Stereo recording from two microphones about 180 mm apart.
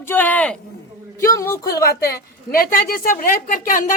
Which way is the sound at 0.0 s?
10° left (ahead or behind).